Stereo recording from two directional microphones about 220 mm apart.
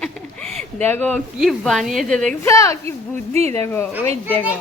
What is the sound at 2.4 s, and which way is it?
Speech, 15° left (ahead or behind).